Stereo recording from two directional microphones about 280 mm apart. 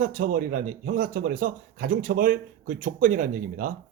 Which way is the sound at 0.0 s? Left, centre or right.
Right.